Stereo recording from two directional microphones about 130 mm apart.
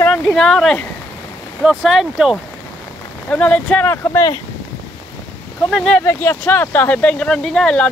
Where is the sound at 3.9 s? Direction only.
20° left (ahead or behind).